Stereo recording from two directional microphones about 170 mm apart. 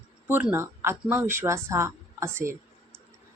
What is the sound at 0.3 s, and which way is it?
A woman's voice, 10° right (ahead or behind).